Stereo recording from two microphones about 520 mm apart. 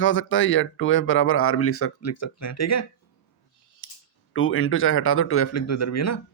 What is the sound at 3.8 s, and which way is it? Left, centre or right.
Typing, left.